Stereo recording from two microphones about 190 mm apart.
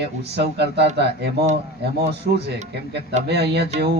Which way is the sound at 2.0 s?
60° right (ahead or behind).